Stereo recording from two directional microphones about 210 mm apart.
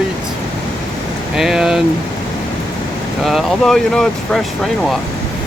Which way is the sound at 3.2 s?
Centre (ahead or behind).